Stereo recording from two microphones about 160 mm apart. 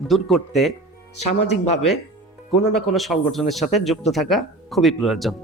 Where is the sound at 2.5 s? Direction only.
Centre (ahead or behind).